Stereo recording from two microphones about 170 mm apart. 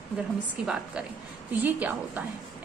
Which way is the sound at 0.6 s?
5° right (ahead or behind).